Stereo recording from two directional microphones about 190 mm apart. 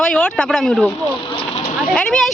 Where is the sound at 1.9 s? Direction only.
5° left (ahead or behind).